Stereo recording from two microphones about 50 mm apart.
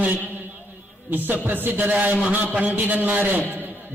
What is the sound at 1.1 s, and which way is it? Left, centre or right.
A man's voice, right.